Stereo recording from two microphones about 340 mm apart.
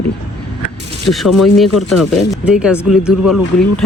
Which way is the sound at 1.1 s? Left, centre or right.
Centre.